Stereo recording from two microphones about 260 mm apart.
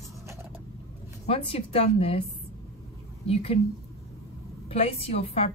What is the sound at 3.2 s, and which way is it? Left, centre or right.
Speech, left.